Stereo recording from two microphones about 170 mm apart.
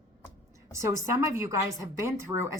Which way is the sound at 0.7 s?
15° right (ahead or behind).